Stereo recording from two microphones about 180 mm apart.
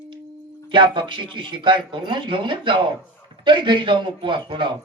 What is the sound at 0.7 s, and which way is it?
Speech, 25° right (ahead or behind).